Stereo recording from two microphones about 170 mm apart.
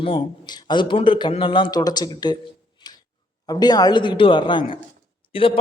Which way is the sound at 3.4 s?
25° left (ahead or behind).